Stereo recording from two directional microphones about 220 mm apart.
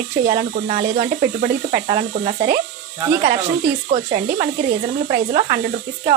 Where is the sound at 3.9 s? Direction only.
35° right (ahead or behind).